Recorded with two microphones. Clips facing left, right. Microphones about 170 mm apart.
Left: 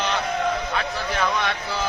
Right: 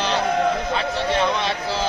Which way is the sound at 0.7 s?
30° right (ahead or behind).